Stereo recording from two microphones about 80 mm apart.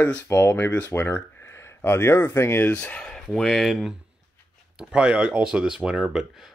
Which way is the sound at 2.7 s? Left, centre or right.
Centre.